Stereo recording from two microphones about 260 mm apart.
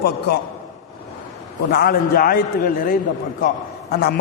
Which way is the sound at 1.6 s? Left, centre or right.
Left.